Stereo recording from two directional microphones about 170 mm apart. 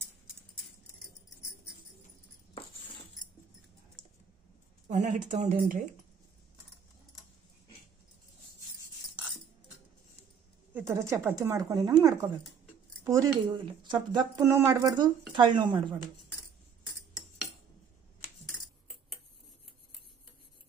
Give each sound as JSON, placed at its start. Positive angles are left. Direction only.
{"t": 4.8, "sound": "speech", "side_deg": -45}
{"t": 10.7, "sound": "speech", "side_deg": -15}